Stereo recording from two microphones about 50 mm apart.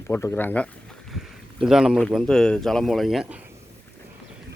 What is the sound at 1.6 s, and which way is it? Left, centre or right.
Speech, centre.